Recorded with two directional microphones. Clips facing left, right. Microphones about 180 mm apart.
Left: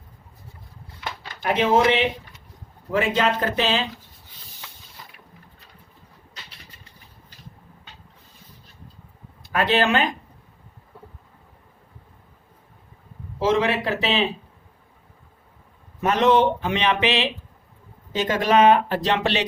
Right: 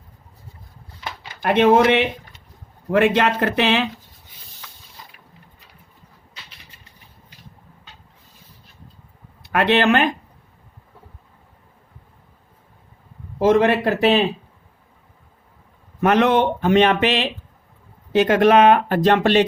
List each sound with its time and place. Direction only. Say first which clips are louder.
1.5 s speech: right 4 dB; 60° right (ahead or behind)
9.4 s speech: right 3 dB; 65° right (ahead or behind)
13.4 s speech: right 5 dB; 50° right (ahead or behind)
16.0 s speech: right 2 dB; 60° right (ahead or behind)
18.1 s speech: right 6 dB; 60° right (ahead or behind)